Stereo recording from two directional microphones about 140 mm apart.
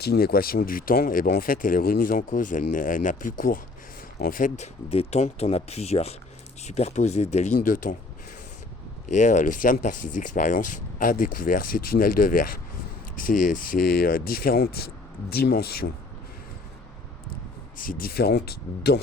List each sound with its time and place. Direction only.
0.2 s speech: 90° left; by 7.9 s 70° left (ahead or behind)
9.0 s speech: 60° left (ahead or behind); by 12.5 s 80° left
13.2 s speech: 70° left (ahead or behind); by 15.9 s 90° left
17.7 s speech: 85° left